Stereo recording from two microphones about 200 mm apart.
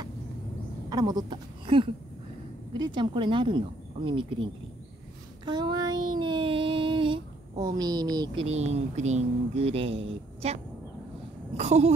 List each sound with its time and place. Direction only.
0.8 s speech: 20° right (ahead or behind)
5.4 s child singing: 20° right (ahead or behind)
7.7 s speech: 20° right (ahead or behind)
8.5 s speech: 35° right (ahead or behind)